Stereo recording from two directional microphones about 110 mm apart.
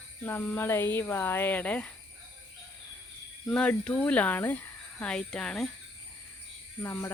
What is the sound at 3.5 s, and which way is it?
Speech, 10° left (ahead or behind).